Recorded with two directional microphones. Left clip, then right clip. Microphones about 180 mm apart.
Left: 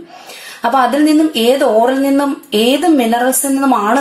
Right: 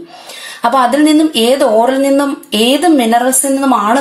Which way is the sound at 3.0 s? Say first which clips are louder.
Right 2 dB; 30° right (ahead or behind).